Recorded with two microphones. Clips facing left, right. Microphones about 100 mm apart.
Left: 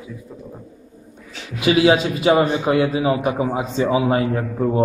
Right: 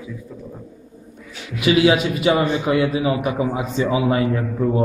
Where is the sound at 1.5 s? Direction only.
25° left (ahead or behind).